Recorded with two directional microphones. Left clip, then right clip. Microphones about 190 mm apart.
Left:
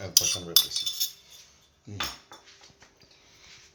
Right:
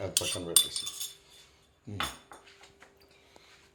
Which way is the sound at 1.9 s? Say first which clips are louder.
Left 1 dB; 10° right (ahead or behind).